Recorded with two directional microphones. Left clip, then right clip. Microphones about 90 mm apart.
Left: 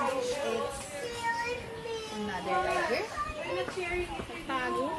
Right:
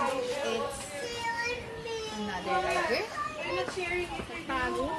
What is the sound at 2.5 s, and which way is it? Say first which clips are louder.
Speech: right 1 dB; 30° right (ahead or behind).